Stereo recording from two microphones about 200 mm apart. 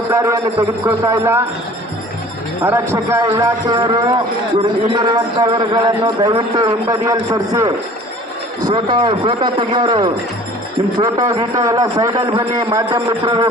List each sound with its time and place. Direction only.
0.1 s a man's voice: 15° right (ahead or behind)
2.6 s a man's voice: 15° right (ahead or behind)
8.7 s a man's voice: 20° right (ahead or behind)